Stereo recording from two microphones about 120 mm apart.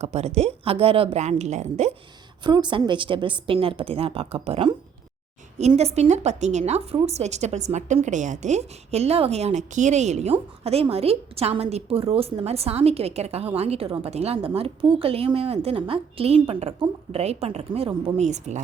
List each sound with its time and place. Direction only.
0.0 s a woman's voice: 65° right (ahead or behind)
2.4 s a woman's voice: 40° right (ahead or behind)
5.5 s a woman's voice: 65° right (ahead or behind)
8.0 s a woman's voice: 90° right; by 10.3 s 70° right (ahead or behind)
10.6 s a woman's voice: 55° right (ahead or behind); by 18.6 s 75° right (ahead or behind)